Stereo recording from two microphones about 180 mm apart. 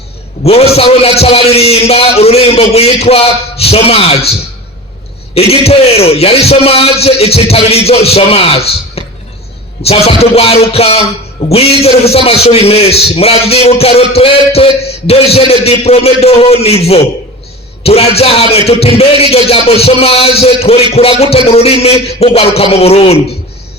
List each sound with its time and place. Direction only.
0.4 s a man's voice: 35° left (ahead or behind)